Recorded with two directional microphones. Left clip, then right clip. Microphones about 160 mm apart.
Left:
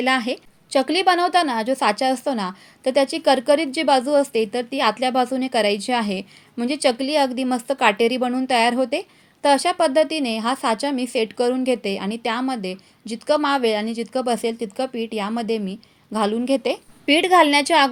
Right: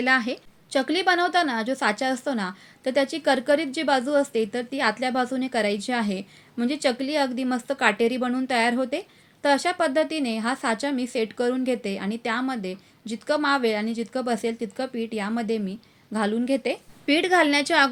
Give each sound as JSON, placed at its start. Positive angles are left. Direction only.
{"t": 0.0, "sound": "a woman's voice", "side_deg": 30}